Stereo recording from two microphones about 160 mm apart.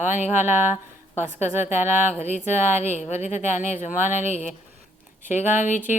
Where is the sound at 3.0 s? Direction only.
45° left (ahead or behind).